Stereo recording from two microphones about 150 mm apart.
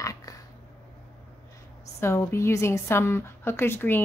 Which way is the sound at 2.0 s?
20° left (ahead or behind).